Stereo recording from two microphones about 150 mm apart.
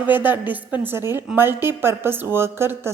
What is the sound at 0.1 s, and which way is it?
A woman's voice, 10° right (ahead or behind).